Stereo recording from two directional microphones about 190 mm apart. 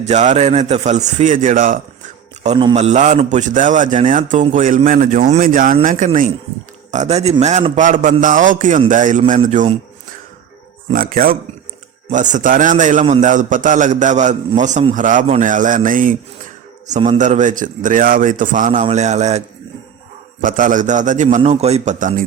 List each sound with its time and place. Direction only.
0.0 s a man's voice: 35° right (ahead or behind)
10.9 s a man's voice: 50° right (ahead or behind)
17.2 s a man's voice: 40° right (ahead or behind)
20.4 s a man's voice: 45° right (ahead or behind)